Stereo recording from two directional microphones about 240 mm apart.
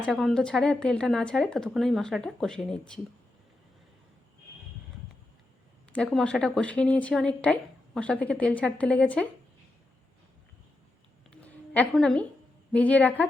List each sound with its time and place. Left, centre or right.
0.0 s speech: centre
5.9 s speech: centre
11.3 s a sound: centre
12.7 s a woman's voice: centre